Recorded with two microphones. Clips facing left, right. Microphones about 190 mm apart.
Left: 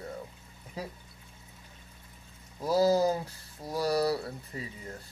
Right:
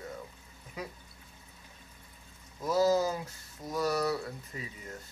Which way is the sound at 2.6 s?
35° left (ahead or behind).